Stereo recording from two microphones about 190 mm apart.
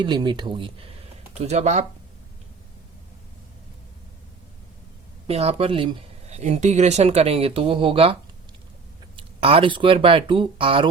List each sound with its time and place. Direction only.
0.0 s speech: 25° right (ahead or behind)
5.3 s speech: 30° right (ahead or behind)
9.1 s speech: 30° right (ahead or behind)